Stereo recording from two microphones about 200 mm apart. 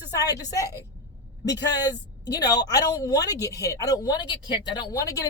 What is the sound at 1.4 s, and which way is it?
A woman's voice, 20° left (ahead or behind).